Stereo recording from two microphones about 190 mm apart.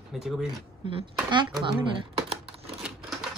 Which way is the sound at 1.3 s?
25° right (ahead or behind).